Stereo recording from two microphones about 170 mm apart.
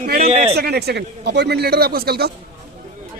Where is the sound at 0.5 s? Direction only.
70° right (ahead or behind).